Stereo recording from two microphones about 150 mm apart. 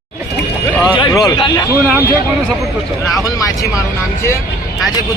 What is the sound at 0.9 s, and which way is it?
Speech, 30° left (ahead or behind).